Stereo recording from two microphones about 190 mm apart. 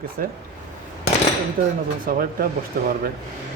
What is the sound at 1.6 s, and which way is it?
Speech, 50° right (ahead or behind).